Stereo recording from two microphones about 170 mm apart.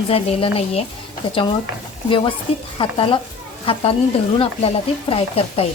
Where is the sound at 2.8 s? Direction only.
30° left (ahead or behind).